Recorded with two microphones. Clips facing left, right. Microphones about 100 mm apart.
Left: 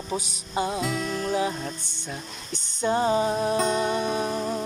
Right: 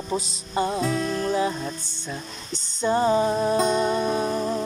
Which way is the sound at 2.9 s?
50° right (ahead or behind).